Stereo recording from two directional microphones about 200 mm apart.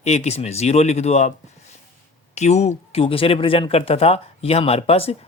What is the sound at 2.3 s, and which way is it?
Speech, 35° left (ahead or behind).